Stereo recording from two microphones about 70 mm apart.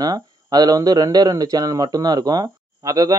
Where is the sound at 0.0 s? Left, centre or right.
Right.